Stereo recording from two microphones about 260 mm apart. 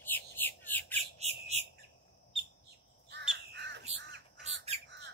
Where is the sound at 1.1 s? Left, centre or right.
Right.